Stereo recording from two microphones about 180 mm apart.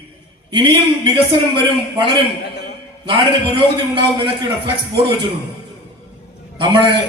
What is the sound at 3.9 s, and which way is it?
Speech, 30° right (ahead or behind).